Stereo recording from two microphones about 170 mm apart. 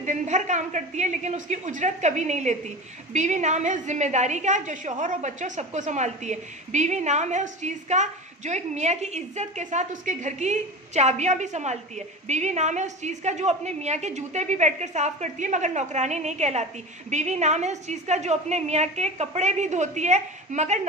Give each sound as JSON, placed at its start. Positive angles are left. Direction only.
{"t": 0.0, "sound": "a woman's voice", "side_deg": -45}